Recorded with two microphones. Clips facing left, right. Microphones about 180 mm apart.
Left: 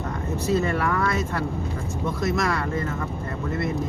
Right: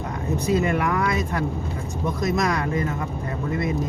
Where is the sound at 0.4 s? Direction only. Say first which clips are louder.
Right 1 dB; 15° right (ahead or behind).